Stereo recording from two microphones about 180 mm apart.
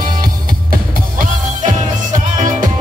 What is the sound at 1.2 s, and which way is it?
Music, 45° right (ahead or behind).